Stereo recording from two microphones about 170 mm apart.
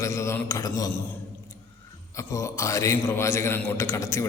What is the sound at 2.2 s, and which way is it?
A man's voice, 20° left (ahead or behind).